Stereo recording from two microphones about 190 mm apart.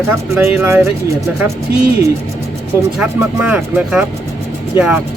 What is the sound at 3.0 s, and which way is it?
Speech, 5° right (ahead or behind).